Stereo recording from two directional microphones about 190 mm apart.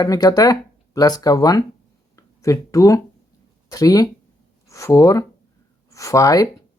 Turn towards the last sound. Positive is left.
turn(degrees=20)  # may be behind; listen again after turning